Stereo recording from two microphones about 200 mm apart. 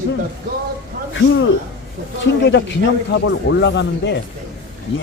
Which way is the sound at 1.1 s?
70° left (ahead or behind).